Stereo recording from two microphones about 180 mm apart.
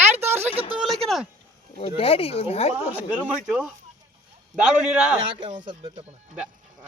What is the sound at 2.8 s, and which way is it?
Speech, 5° right (ahead or behind).